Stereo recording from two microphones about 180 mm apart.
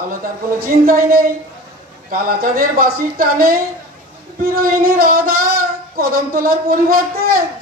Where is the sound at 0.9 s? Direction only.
55° right (ahead or behind).